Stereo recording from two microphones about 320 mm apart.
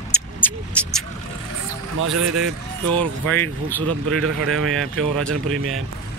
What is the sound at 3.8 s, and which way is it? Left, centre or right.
Speech, right.